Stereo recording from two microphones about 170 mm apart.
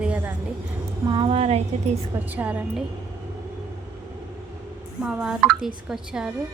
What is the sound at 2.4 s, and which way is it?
Speech, 10° right (ahead or behind).